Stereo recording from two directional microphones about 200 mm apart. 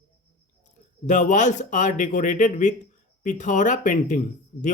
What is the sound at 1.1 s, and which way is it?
Speech, 40° left (ahead or behind).